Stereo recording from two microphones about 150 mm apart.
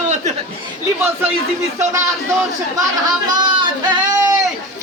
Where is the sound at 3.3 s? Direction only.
30° right (ahead or behind).